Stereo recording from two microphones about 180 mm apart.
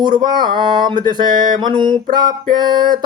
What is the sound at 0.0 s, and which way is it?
Music, 25° right (ahead or behind).